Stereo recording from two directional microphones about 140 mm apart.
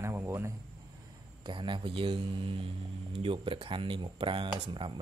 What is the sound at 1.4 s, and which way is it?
Speech, 35° right (ahead or behind).